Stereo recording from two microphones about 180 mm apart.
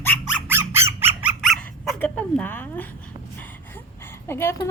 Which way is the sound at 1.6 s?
5° left (ahead or behind).